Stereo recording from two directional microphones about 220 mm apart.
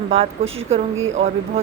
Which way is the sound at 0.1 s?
25° right (ahead or behind).